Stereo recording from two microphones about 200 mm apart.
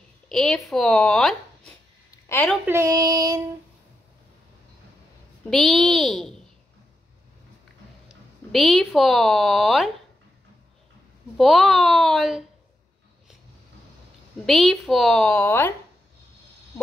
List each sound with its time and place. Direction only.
0.3 s a child's voice: 5° left (ahead or behind)
2.0 s a sound: 15° left (ahead or behind)
2.5 s child singing: 10° right (ahead or behind)
5.5 s a child's voice: centre (ahead or behind)
8.5 s a child's voice: centre (ahead or behind)
11.3 s a child's voice: centre (ahead or behind)
14.4 s a child's voice: centre (ahead or behind)